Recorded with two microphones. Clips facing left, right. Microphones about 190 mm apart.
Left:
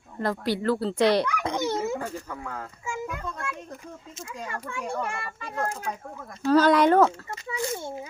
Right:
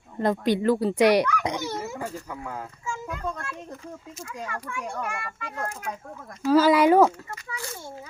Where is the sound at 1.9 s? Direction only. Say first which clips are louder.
Left 1 dB; 10° right (ahead or behind).